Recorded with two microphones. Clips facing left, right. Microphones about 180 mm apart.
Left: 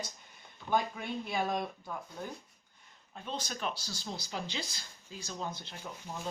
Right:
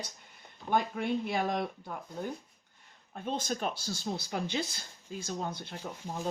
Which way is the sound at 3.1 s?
50° right (ahead or behind).